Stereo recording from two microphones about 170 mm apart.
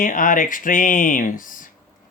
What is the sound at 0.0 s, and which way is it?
Speech, 55° left (ahead or behind).